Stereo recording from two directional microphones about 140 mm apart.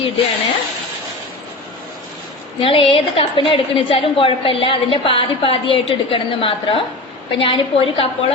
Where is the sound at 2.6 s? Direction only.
40° left (ahead or behind).